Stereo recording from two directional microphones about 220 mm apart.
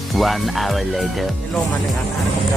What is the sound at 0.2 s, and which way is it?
Speech, centre (ahead or behind).